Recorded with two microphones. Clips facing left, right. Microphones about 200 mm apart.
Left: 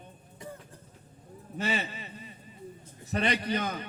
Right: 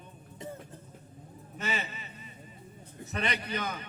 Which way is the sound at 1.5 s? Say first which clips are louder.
Left 4 dB; 35° left (ahead or behind).